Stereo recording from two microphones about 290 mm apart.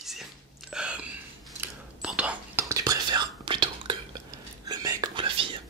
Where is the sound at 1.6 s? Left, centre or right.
Centre.